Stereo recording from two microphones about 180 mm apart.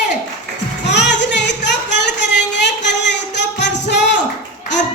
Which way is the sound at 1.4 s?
75° left (ahead or behind).